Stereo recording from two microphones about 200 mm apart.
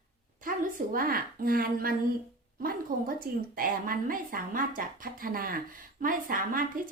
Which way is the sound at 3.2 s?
45° right (ahead or behind).